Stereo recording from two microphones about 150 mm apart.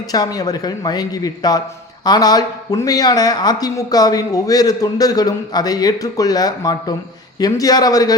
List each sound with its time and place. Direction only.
0.1 s speech: 25° left (ahead or behind)